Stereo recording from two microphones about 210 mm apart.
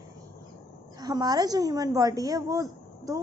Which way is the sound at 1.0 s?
20° right (ahead or behind).